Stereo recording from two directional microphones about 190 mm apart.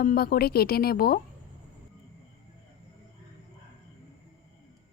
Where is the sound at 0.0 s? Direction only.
50° left (ahead or behind).